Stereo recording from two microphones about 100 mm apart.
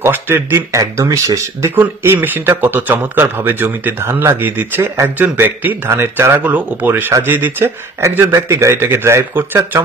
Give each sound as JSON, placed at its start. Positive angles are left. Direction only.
{"t": 0.0, "sound": "a man's voice", "side_deg": -25}
{"t": 1.8, "sound": "a man's voice", "side_deg": -20}